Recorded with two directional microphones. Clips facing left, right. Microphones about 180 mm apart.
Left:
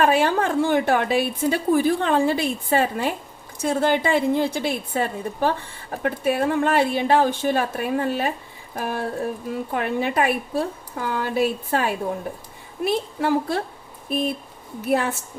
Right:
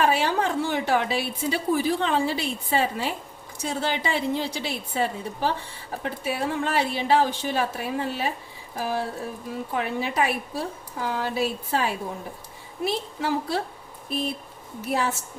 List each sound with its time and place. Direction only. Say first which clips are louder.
0.0 s a woman's voice: left 4 dB; 50° left (ahead or behind)